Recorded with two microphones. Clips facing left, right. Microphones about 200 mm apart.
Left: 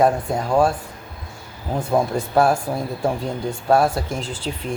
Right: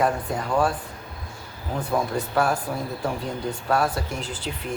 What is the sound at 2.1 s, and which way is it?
Speech, 25° left (ahead or behind).